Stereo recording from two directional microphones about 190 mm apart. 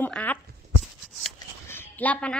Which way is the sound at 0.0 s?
10° left (ahead or behind).